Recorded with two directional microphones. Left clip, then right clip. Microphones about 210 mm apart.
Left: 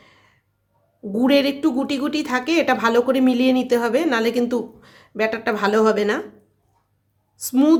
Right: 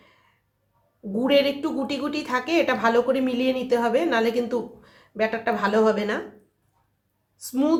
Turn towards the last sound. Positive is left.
turn(degrees=45)  # may be behind; listen again after turning